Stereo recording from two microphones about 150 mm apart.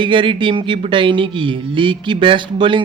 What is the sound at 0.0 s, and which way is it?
Speech, 35° right (ahead or behind).